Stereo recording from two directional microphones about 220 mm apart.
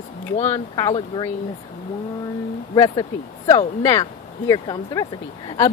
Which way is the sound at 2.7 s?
15° left (ahead or behind).